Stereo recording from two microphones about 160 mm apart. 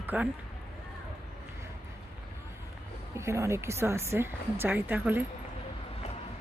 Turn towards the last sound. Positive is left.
turn(degrees=-10)  # may be behind; listen again after turning